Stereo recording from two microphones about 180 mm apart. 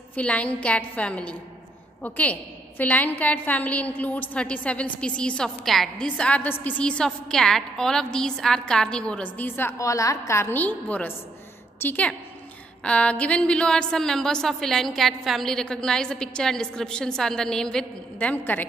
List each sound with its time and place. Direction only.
0.1 s a woman's voice: 5° left (ahead or behind)